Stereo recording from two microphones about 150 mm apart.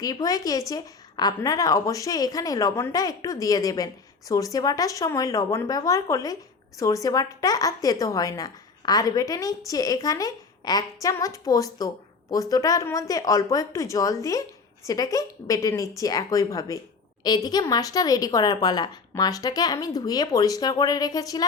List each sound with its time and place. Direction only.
0.0 s a woman's voice: 25° left (ahead or behind)